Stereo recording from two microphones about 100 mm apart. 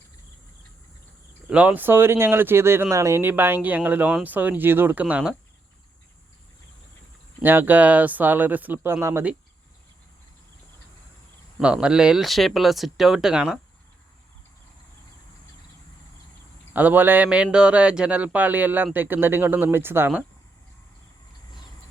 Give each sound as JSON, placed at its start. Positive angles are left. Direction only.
{"t": 1.5, "sound": "speech", "side_deg": -15}
{"t": 7.4, "sound": "speech", "side_deg": -20}
{"t": 11.6, "sound": "speech", "side_deg": -10}
{"t": 16.7, "sound": "speech", "side_deg": -15}